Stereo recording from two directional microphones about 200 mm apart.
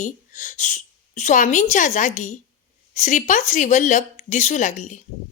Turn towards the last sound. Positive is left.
turn(degrees=40)  # may be behind; listen again after turning